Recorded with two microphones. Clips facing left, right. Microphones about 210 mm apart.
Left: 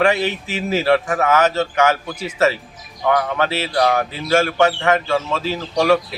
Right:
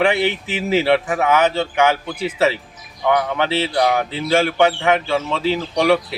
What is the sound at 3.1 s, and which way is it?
Speech, 15° right (ahead or behind).